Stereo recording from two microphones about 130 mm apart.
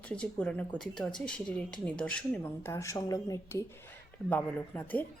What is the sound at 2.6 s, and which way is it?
A woman's voice, 20° left (ahead or behind).